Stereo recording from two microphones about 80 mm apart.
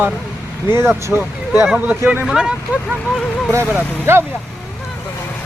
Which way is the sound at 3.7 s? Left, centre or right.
Right.